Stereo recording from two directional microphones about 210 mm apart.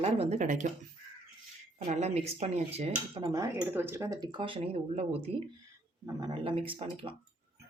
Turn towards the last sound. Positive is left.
turn(degrees=-25)  # may be behind; listen again after turning